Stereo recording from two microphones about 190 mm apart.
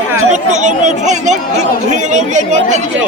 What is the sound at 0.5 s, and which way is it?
Speech, 40° right (ahead or behind).